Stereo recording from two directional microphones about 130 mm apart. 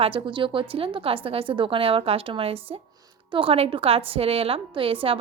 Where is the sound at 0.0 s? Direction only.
40° right (ahead or behind).